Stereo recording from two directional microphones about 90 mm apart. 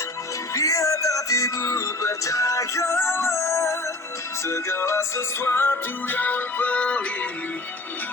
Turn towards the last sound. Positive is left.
turn(degrees=15)  # may be behind; listen again after turning